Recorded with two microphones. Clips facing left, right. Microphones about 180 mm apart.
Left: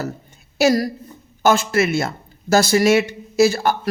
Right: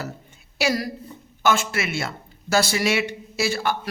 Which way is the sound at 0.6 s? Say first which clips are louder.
Left 7 dB; 45° left (ahead or behind).